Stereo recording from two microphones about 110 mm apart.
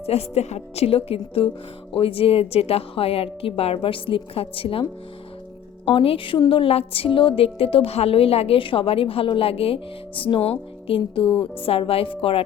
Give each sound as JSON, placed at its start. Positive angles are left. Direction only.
{"t": 0.0, "sound": "a woman's voice", "side_deg": 70}